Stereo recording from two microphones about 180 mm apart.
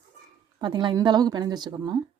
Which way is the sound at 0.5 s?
25° right (ahead or behind).